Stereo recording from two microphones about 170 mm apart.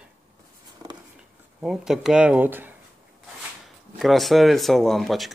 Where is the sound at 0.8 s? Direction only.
25° right (ahead or behind).